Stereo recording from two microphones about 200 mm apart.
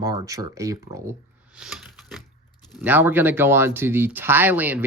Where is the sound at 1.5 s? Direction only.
5° right (ahead or behind).